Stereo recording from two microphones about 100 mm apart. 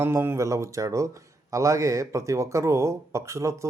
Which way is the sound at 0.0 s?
25° right (ahead or behind).